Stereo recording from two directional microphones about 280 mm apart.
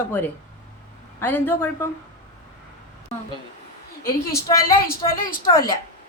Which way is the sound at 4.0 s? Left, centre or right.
Left.